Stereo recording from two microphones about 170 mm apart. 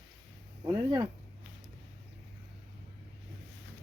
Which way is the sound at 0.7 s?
25° right (ahead or behind).